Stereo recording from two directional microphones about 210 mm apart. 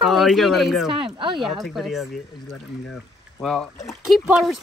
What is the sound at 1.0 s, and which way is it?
Speech, 25° right (ahead or behind).